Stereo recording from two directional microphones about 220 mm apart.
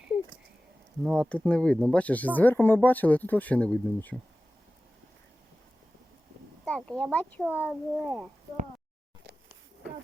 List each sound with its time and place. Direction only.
1.0 s speech: centre (ahead or behind)
6.7 s a child's voice: 5° left (ahead or behind)